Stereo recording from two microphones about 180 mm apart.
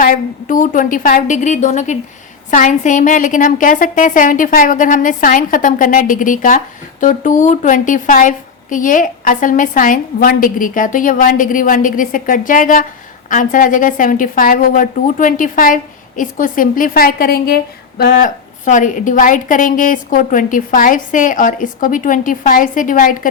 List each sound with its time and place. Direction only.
0.0 s a woman's voice: 50° left (ahead or behind)
18.6 s a woman's voice: 45° left (ahead or behind)